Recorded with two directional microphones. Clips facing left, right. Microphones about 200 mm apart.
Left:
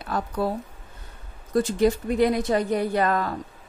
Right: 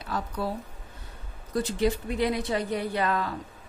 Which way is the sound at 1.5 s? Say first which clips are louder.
Left 5 dB; 45° left (ahead or behind).